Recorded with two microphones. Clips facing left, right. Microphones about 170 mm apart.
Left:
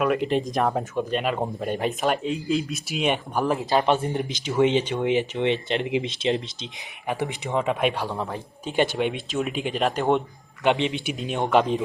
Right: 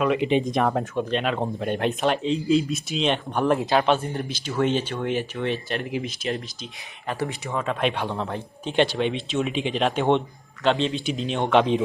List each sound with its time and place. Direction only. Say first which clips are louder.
0.0 s speech: right 1 dB; centre (ahead or behind)
3.8 s speech: even; 15° left (ahead or behind)
10.7 s speech: even; 15° left (ahead or behind)